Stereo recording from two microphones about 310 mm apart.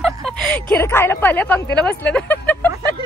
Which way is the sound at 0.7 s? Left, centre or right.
Centre.